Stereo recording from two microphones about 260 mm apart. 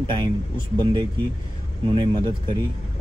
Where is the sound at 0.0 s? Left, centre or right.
Centre.